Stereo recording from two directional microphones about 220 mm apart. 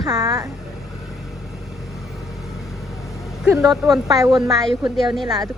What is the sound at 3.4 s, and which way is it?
Speech, 15° right (ahead or behind).